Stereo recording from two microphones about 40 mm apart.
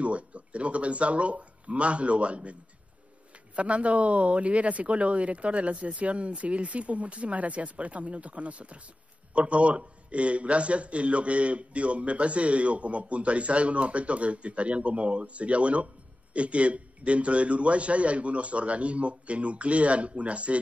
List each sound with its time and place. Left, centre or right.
0.0 s a man's voice: right
3.5 s a man's voice: right